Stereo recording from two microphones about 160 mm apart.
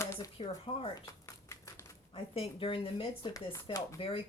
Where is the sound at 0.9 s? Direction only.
20° left (ahead or behind).